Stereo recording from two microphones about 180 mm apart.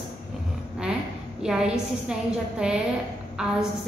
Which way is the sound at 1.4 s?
5° right (ahead or behind).